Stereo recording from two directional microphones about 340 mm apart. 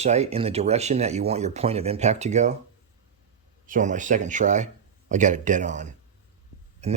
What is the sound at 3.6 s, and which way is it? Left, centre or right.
Speech, right.